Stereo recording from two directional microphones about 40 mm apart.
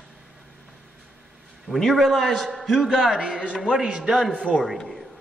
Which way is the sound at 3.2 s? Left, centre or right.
Right.